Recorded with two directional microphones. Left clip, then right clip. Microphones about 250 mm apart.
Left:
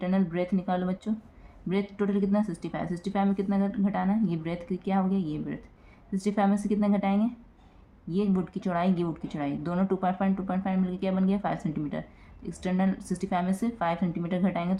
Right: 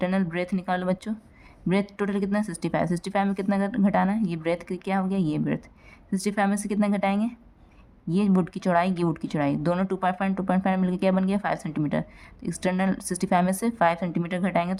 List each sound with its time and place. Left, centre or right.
0.0 s a woman's voice: right